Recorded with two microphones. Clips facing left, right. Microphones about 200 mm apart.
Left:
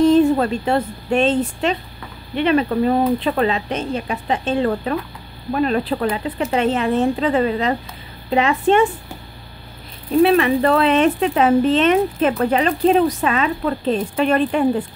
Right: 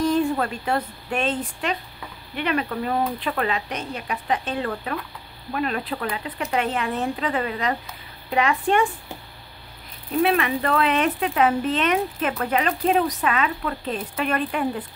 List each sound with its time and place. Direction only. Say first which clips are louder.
0.0 s speech: left 8 dB; 25° left (ahead or behind)
10.2 s speech: left 7 dB; 30° left (ahead or behind)